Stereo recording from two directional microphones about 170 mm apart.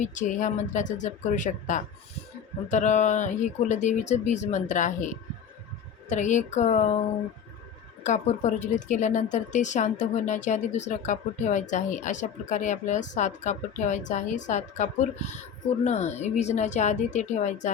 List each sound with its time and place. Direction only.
0.0 s speech: 45° left (ahead or behind)
6.1 s speech: 45° left (ahead or behind)
8.0 s speech: 45° left (ahead or behind)